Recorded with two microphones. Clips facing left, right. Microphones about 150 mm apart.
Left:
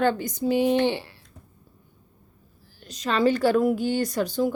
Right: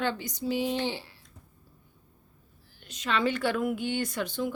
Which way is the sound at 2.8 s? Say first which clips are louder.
Left 6 dB; 40° left (ahead or behind).